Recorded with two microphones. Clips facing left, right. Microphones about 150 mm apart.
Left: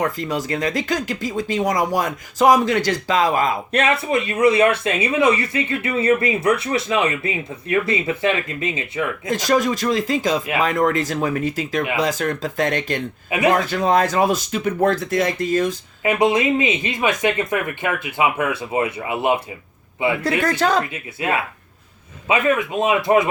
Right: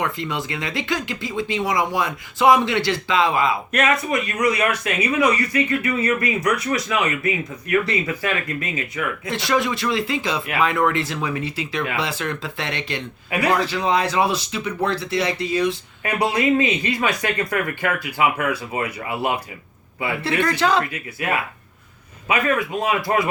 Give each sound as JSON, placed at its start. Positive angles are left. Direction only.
{"t": 0.0, "sound": "speech", "side_deg": 40}
{"t": 3.7, "sound": "speech", "side_deg": 30}
{"t": 9.2, "sound": "speech", "side_deg": 40}
{"t": 16.0, "sound": "speech", "side_deg": 20}
{"t": 20.6, "sound": "speech", "side_deg": 45}
{"t": 20.9, "sound": "speech", "side_deg": 25}